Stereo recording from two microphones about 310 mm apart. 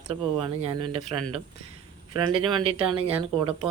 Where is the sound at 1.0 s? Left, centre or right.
Centre.